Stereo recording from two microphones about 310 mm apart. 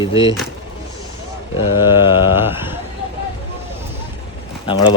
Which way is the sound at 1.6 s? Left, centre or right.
Centre.